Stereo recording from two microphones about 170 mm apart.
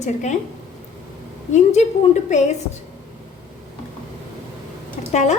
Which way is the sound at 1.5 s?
40° left (ahead or behind).